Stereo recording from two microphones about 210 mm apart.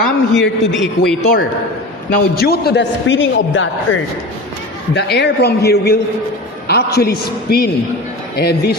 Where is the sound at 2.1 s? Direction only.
50° left (ahead or behind); by 4.0 s 65° left (ahead or behind).